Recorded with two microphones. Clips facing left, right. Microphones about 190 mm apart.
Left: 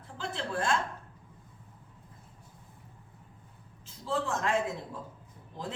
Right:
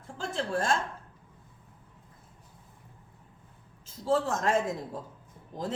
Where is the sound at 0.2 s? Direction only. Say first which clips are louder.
Right 3 dB; 45° right (ahead or behind).